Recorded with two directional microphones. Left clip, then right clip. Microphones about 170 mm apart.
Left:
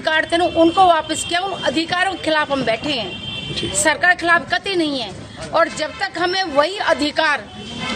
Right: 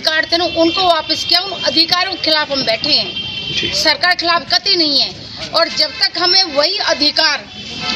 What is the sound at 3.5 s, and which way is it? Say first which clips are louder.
A woman's voice: right 4 dB; 10° left (ahead or behind).